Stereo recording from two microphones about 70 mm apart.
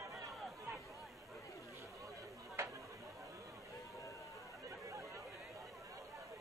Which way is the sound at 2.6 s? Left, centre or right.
Right.